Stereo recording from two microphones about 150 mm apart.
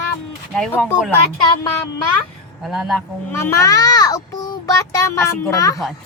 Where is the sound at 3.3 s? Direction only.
15° left (ahead or behind).